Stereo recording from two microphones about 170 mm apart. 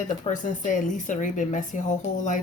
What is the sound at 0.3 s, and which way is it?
Speech, 50° left (ahead or behind).